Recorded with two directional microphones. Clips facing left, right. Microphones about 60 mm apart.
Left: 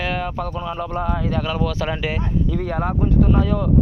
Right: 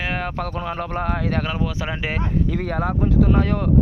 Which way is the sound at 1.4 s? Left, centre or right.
Right.